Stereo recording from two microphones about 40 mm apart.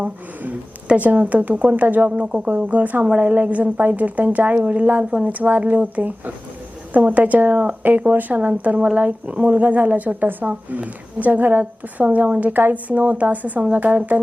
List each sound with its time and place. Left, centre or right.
0.9 s a woman's voice: right
2.6 s a woman's voice: right
8.4 s a woman's voice: right